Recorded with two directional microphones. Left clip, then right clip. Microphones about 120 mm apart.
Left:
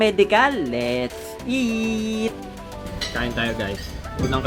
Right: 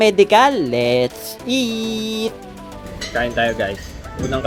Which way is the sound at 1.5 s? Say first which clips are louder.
Right 3 dB; 25° right (ahead or behind).